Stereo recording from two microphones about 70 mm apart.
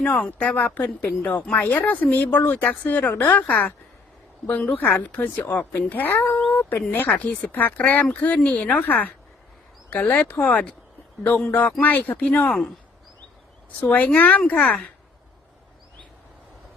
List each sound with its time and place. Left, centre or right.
0.0 s speech: centre
13.8 s speech: left